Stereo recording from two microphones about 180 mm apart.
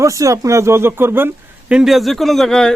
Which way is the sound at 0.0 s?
20° right (ahead or behind).